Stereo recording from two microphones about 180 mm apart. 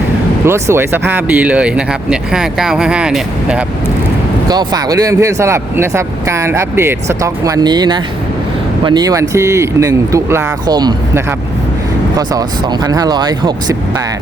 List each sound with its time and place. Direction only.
0.4 s speech: 15° right (ahead or behind)
4.4 s speech: 20° right (ahead or behind)